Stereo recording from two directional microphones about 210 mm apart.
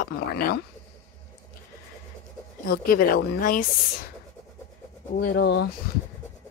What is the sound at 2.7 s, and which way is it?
Speech, 45° left (ahead or behind).